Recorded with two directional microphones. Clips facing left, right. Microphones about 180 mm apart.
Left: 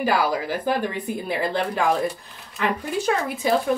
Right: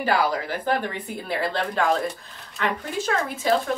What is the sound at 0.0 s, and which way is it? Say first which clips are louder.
A woman's voice: left 1 dB; 10° left (ahead or behind).